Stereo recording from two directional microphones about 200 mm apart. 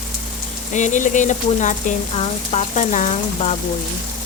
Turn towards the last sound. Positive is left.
turn(degrees=35)  # may be behind; listen again after turning